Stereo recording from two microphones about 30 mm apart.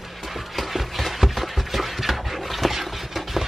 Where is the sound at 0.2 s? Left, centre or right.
Centre.